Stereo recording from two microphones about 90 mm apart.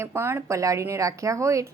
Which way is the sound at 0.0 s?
30° right (ahead or behind).